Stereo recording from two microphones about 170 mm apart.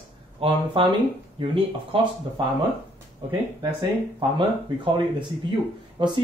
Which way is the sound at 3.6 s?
25° right (ahead or behind).